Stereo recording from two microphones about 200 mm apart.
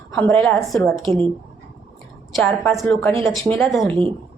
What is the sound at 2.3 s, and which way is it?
A woman's voice, 5° left (ahead or behind).